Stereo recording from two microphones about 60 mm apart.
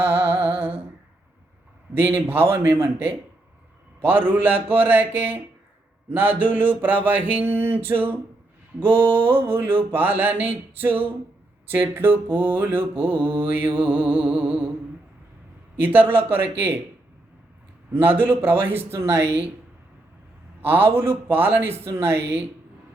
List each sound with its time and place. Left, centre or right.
0.1 s humming: right
1.9 s mantra: right
4.0 s mantra: right
15.8 s mantra: right
17.9 s mantra: right
20.6 s mantra: right